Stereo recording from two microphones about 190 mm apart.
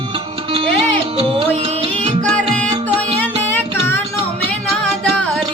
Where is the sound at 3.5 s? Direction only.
10° left (ahead or behind).